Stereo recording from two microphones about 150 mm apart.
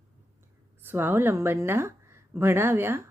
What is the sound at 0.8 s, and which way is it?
A woman's voice, 15° right (ahead or behind).